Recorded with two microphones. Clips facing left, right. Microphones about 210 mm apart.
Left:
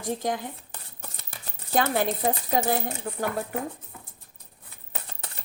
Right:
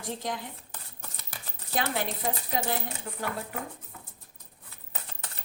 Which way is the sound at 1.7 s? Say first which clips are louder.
Left 6 dB; 45° left (ahead or behind).